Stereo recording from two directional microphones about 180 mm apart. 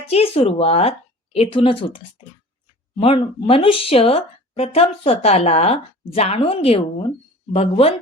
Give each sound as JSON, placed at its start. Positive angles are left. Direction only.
{"t": 0.1, "sound": "speech", "side_deg": 30}
{"t": 3.0, "sound": "speech", "side_deg": 30}